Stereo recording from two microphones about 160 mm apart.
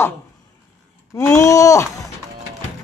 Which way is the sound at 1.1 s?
20° left (ahead or behind).